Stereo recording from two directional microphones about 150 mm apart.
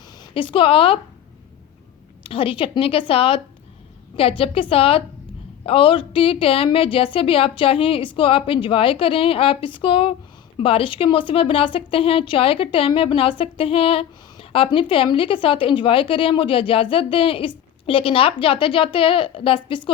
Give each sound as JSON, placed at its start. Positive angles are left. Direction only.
{"t": 0.2, "sound": "speech", "side_deg": 35}
{"t": 2.2, "sound": "a woman's voice", "side_deg": 35}